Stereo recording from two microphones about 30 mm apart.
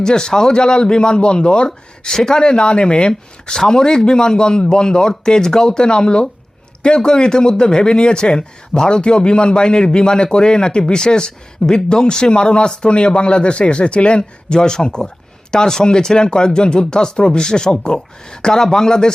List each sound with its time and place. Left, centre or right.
0.0 s a man's voice: left
2.0 s a man's voice: centre
3.5 s a man's voice: centre